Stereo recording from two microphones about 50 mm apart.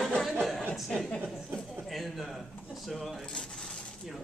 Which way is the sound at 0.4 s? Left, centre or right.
Centre.